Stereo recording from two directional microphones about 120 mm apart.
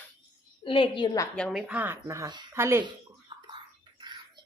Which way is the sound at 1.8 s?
20° right (ahead or behind).